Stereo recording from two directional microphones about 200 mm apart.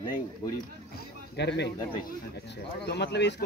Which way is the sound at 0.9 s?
60° left (ahead or behind).